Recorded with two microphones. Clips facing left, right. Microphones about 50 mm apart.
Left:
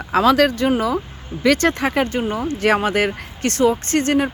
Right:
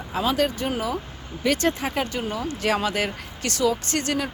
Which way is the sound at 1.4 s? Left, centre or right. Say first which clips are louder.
Left 6 dB; left.